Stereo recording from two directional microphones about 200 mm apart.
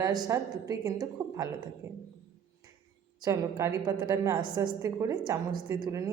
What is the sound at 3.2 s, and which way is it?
A woman's voice, 15° right (ahead or behind).